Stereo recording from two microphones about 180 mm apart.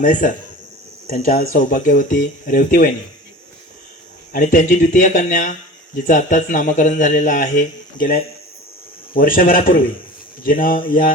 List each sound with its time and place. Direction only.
0.0 s speech: 45° left (ahead or behind)
4.3 s speech: 45° left (ahead or behind)
9.1 s speech: 50° left (ahead or behind)